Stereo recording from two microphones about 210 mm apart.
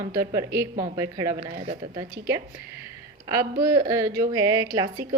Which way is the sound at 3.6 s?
15° right (ahead or behind).